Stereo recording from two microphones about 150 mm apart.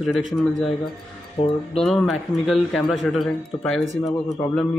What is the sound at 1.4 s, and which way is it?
Speech, 40° left (ahead or behind).